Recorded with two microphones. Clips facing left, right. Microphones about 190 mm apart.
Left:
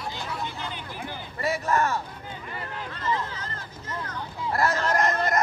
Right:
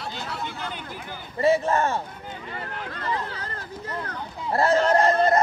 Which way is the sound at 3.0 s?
60° right (ahead or behind).